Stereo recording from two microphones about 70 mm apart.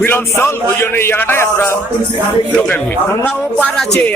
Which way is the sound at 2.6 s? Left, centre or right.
Left.